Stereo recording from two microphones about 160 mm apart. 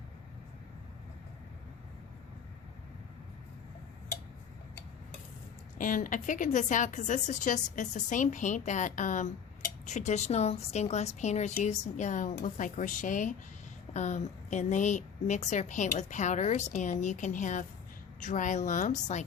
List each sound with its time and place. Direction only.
5.7 s a woman's voice: 55° left (ahead or behind)